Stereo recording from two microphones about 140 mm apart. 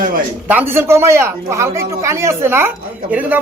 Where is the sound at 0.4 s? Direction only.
15° right (ahead or behind).